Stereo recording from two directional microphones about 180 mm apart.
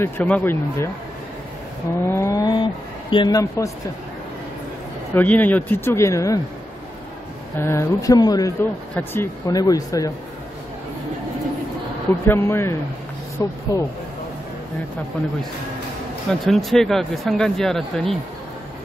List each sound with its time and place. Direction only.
0.0 s speech: 10° left (ahead or behind)
2.0 s speech: 15° left (ahead or behind)
5.1 s speech: 10° left (ahead or behind)
7.5 s speech: 15° left (ahead or behind)
12.3 s speech: 15° left (ahead or behind)
16.3 s speech: centre (ahead or behind)